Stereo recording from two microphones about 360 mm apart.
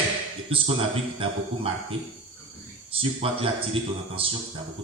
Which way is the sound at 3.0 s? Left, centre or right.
Centre.